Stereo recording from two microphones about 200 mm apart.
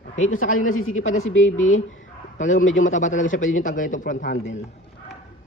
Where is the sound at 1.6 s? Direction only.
40° left (ahead or behind).